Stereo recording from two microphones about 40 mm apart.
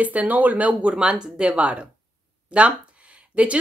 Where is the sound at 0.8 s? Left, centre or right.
Right.